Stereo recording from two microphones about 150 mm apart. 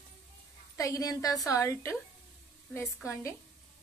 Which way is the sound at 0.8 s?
25° left (ahead or behind).